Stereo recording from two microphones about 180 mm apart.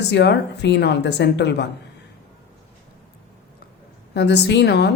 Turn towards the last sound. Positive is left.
turn(degrees=70)  # may be behind; listen again after turning